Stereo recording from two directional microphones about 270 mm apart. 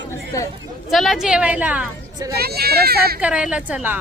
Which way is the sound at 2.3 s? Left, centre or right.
Right.